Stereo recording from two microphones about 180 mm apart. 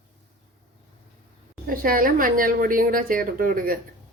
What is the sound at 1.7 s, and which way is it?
A woman's voice, 55° right (ahead or behind).